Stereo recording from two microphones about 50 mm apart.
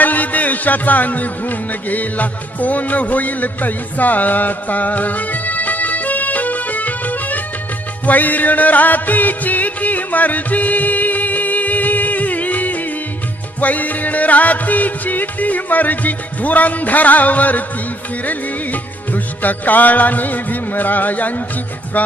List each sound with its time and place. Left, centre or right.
0.0 s a man's voice: left
8.0 s music: left